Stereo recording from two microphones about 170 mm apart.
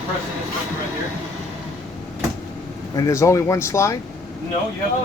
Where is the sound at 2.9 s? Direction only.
20° left (ahead or behind).